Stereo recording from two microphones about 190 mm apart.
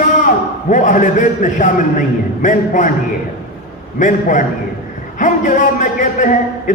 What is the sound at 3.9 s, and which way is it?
A man's voice, 40° left (ahead or behind).